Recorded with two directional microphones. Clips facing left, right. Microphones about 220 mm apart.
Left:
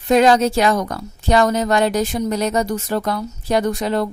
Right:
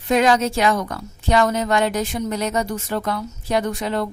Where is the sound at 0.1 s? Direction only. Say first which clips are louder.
Left 4 dB; 35° left (ahead or behind).